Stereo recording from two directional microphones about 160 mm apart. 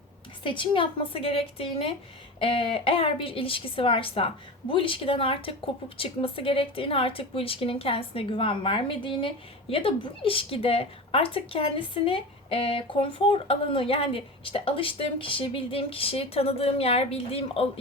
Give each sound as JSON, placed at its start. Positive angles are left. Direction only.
{"t": 0.4, "sound": "speech", "side_deg": 30}